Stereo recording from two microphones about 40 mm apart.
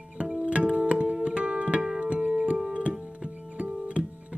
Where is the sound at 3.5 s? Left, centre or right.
Right.